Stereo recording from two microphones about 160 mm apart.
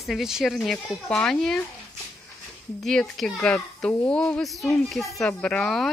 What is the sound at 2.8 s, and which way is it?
Speech, 5° left (ahead or behind).